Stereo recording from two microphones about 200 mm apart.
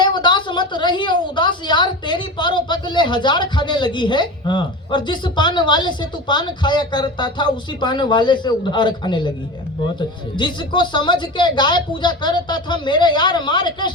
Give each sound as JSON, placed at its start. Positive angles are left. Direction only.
{"t": 0.0, "sound": "a woman's voice", "side_deg": 20}
{"t": 10.3, "sound": "a woman's voice", "side_deg": 25}